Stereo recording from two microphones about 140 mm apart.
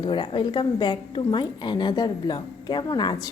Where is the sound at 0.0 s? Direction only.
30° left (ahead or behind).